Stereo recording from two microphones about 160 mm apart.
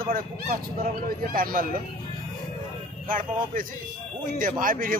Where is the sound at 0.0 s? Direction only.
60° right (ahead or behind).